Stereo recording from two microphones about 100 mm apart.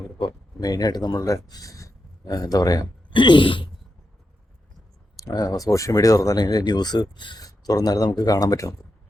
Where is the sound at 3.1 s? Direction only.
55° left (ahead or behind).